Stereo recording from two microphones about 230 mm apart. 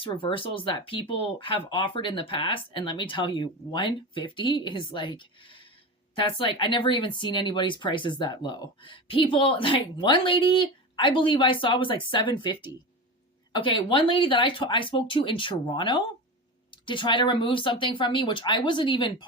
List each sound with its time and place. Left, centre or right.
0.0 s speech: left